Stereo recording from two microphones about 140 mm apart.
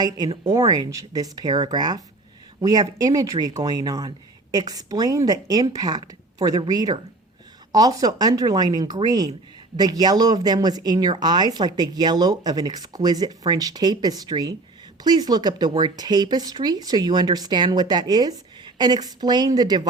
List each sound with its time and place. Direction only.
0.3 s speech: 30° right (ahead or behind)